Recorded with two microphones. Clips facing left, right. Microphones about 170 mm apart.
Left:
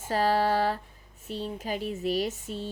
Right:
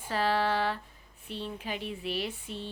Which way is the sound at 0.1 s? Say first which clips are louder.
Left 4 dB; 40° left (ahead or behind).